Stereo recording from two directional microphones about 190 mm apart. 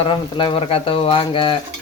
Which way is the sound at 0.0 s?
25° left (ahead or behind).